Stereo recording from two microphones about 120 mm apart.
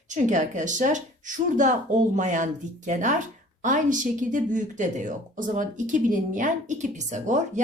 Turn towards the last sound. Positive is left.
turn(degrees=-90)